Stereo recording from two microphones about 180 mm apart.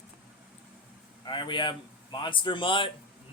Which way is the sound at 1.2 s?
25° left (ahead or behind).